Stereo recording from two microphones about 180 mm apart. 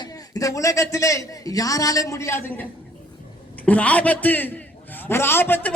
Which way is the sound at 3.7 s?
10° left (ahead or behind).